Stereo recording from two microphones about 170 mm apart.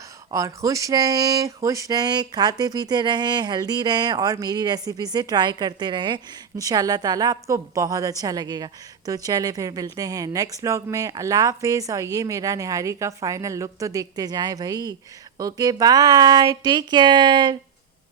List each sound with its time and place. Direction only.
0.3 s speech: 20° right (ahead or behind)